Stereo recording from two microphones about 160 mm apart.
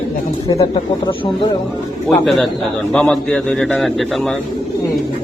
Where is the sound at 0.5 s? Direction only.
20° left (ahead or behind).